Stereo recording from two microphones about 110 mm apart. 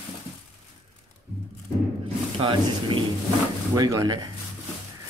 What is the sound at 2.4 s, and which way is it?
Speech, 50° right (ahead or behind).